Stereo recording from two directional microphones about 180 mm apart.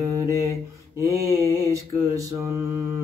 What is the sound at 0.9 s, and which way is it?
Mantra, 20° right (ahead or behind).